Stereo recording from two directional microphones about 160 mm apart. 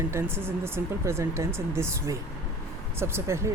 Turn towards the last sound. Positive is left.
turn(degrees=-15)  # may be behind; listen again after turning